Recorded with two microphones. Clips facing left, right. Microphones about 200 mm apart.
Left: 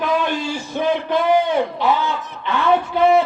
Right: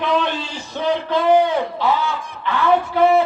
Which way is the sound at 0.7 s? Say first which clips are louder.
Even; 20° left (ahead or behind).